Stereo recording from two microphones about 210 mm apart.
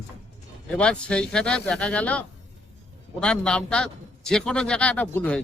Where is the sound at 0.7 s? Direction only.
5° left (ahead or behind).